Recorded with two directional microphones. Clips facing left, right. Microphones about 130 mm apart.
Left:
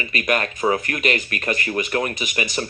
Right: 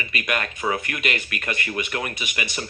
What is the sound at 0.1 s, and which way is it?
Speech, 40° left (ahead or behind).